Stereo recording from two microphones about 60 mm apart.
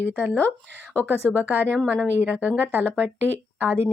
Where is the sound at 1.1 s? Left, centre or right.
Left.